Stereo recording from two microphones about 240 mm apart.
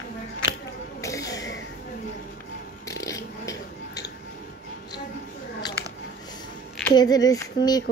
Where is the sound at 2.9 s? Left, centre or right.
Centre.